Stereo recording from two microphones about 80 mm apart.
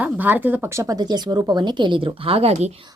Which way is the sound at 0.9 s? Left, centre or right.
Right.